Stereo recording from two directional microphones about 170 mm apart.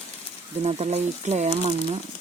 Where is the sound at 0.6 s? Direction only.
40° right (ahead or behind).